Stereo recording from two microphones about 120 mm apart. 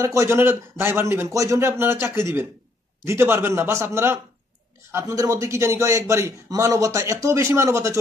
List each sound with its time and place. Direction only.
0.0 s a man's voice: 25° right (ahead or behind)